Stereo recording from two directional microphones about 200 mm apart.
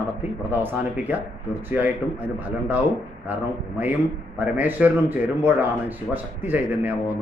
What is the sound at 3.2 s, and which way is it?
A man's voice, 10° right (ahead or behind).